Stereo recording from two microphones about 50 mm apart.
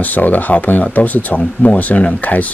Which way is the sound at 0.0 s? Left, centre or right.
Left.